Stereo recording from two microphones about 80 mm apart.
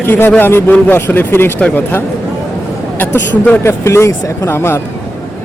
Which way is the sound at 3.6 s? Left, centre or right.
Left.